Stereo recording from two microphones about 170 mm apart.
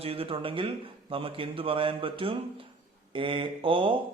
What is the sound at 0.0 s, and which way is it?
Speech, 35° right (ahead or behind).